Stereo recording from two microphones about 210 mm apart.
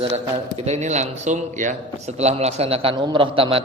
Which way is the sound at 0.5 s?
35° right (ahead or behind).